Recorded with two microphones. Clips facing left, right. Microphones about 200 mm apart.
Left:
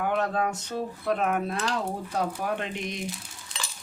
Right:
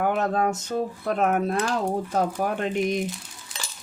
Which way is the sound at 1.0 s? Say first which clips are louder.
Right 2 dB; 45° right (ahead or behind).